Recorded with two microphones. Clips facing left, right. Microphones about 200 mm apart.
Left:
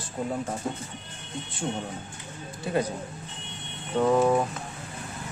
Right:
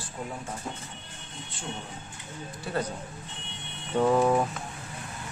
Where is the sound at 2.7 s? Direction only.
20° left (ahead or behind).